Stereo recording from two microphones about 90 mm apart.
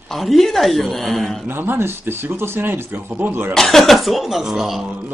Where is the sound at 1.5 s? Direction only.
25° right (ahead or behind).